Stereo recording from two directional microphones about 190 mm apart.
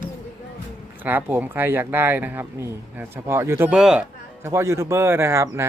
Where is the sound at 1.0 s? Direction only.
10° right (ahead or behind).